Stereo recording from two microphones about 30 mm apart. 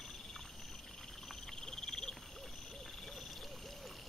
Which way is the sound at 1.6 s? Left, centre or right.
Centre.